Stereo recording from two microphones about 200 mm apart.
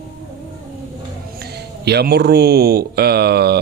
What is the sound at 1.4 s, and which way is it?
A man's voice, 55° right (ahead or behind).